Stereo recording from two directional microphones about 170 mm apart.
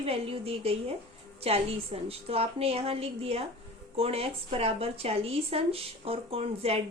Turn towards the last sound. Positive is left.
turn(degrees=-35)  # may be behind; listen again after turning